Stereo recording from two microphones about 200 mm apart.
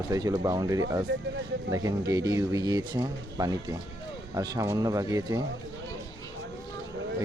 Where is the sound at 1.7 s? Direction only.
15° right (ahead or behind).